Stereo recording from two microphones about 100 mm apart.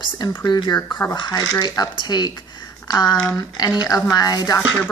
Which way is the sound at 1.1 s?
40° left (ahead or behind).